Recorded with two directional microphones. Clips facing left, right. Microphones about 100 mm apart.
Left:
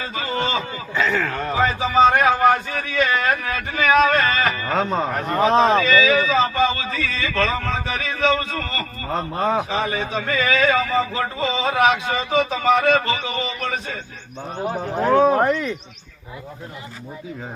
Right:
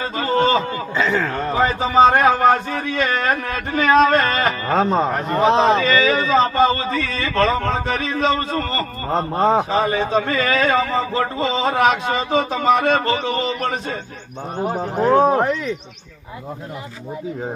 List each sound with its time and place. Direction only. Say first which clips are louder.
0.0 s a sound: right 6 dB; 40° right (ahead or behind)
0.9 s speech: right 1 dB; 25° right (ahead or behind); by 4.4 s 45° right (ahead or behind)
4.4 s speech: right 3 dB; 30° right (ahead or behind)
5.8 s speech: even; 40° right (ahead or behind)
14.6 s speech: right 3 dB; 20° right (ahead or behind)
15.3 s speech: even; centre (ahead or behind)